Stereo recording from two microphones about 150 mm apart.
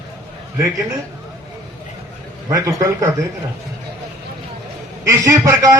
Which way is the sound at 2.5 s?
20° right (ahead or behind).